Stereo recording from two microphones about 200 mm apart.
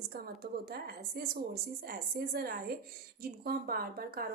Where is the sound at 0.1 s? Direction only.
50° right (ahead or behind).